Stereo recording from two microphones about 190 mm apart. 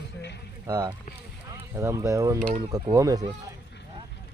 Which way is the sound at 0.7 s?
20° right (ahead or behind).